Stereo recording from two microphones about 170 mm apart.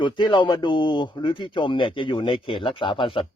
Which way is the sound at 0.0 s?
30° left (ahead or behind).